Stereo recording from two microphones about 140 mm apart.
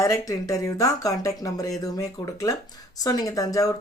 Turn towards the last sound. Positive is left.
turn(degrees=25)  # may be behind; listen again after turning